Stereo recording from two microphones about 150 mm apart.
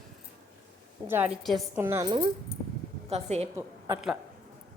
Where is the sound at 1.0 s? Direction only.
10° right (ahead or behind).